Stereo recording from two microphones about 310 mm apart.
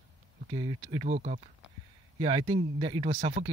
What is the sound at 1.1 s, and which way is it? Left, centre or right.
Speech, right.